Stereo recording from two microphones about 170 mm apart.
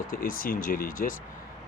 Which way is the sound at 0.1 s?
55° left (ahead or behind).